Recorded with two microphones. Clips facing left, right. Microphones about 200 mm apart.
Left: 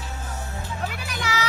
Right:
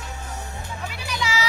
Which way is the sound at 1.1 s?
55° left (ahead or behind).